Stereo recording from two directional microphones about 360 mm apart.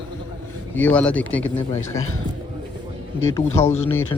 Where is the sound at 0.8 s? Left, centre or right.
Centre.